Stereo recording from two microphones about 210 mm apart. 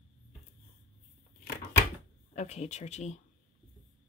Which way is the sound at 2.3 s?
30° left (ahead or behind).